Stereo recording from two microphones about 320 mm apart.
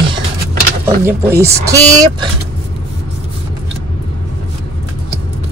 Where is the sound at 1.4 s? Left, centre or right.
Centre.